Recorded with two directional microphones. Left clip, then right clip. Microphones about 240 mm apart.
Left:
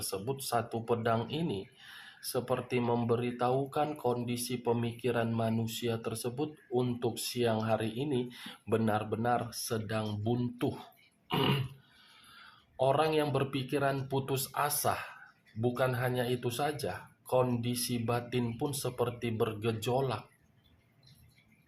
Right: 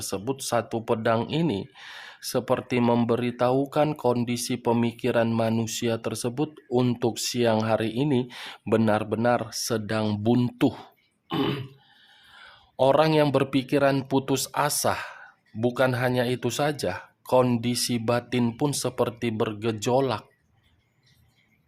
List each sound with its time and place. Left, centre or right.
0.1 s speech: right
12.4 s speech: right